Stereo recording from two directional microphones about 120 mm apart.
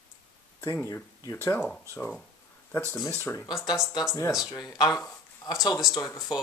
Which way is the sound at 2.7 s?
20° left (ahead or behind).